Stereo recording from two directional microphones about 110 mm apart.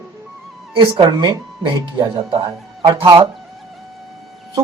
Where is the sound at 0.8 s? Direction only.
35° right (ahead or behind).